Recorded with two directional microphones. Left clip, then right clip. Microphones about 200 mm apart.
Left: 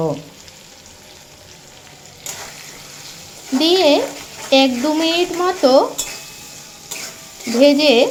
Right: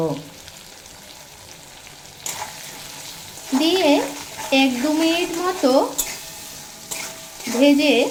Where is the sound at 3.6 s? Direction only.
20° left (ahead or behind).